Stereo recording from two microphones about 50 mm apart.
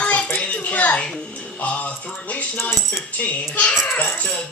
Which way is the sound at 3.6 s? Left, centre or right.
Left.